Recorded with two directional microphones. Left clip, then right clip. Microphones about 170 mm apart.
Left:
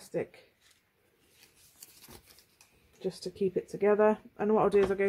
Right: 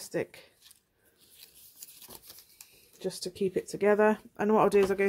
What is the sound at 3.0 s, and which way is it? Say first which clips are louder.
Speech: right 1 dB; 35° right (ahead or behind).